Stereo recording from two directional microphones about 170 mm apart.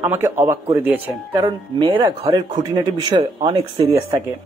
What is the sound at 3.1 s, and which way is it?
Speech, 25° right (ahead or behind).